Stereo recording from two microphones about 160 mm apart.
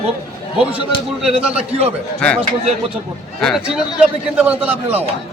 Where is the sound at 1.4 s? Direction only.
10° right (ahead or behind).